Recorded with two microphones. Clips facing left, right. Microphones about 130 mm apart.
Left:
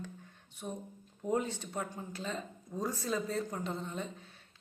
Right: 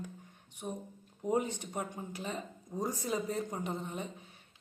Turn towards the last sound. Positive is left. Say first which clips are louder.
# even
turn(degrees=-15)  # may be behind; listen again after turning